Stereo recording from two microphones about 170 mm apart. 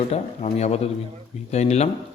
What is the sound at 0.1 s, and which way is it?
Speech, 40° left (ahead or behind).